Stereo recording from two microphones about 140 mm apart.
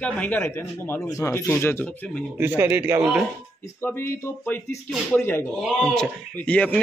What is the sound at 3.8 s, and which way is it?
Speech, 20° left (ahead or behind).